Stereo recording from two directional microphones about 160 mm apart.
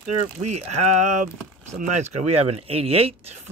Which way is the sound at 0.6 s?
45° right (ahead or behind).